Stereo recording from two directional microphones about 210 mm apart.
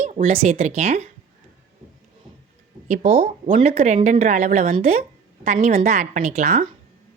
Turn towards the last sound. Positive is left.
turn(degrees=-35)  # may be behind; listen again after turning